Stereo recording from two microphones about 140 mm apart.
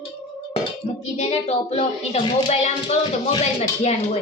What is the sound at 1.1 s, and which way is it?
Speech, 55° left (ahead or behind).